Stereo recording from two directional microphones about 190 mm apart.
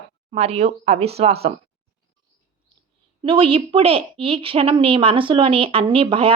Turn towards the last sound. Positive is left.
turn(degrees=-30)  # may be behind; listen again after turning